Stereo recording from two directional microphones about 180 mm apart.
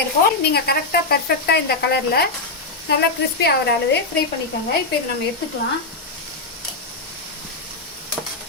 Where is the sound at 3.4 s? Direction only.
65° left (ahead or behind).